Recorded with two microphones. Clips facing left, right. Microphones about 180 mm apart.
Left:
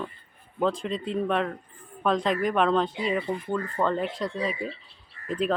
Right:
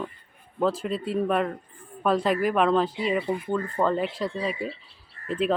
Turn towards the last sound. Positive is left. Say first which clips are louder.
# right 1 dB
turn(degrees=-35)  # may be behind; listen again after turning